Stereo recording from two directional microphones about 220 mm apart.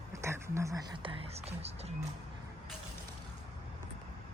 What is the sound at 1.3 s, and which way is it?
Speech, 30° right (ahead or behind).